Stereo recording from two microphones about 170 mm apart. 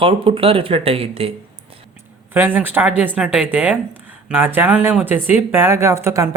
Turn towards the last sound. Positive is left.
turn(degrees=-15)  # may be behind; listen again after turning